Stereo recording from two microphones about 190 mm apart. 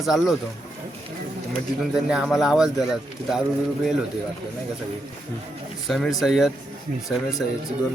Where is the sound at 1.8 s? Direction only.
5° right (ahead or behind).